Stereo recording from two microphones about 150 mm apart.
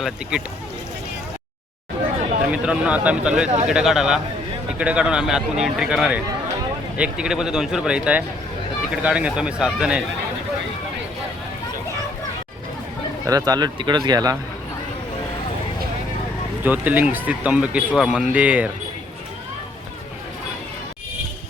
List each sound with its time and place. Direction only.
0.0 s a man's voice: 5° right (ahead or behind)
2.5 s a man's voice: 10° right (ahead or behind)
13.2 s speech: 25° right (ahead or behind)
16.6 s a man's voice: 10° right (ahead or behind)